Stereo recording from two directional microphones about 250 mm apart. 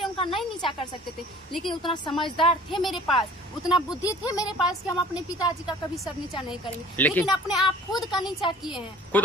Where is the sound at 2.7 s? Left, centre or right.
Centre.